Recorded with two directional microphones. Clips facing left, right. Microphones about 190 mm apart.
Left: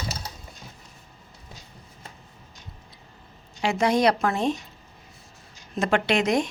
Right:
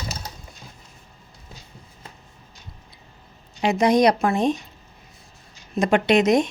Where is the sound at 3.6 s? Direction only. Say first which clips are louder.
Right 4 dB; 20° right (ahead or behind).